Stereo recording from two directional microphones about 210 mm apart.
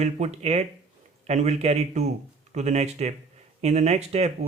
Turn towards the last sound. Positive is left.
turn(degrees=-30)  # may be behind; listen again after turning